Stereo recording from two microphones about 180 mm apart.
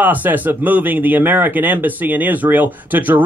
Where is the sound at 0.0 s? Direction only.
10° right (ahead or behind).